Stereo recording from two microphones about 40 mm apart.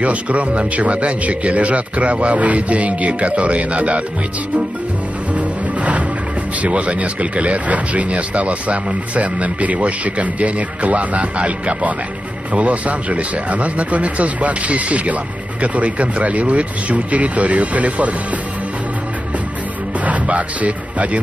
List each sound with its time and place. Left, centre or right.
0.0 s speech: right
5.3 s music: right
6.6 s speech: right
20.1 s speech: right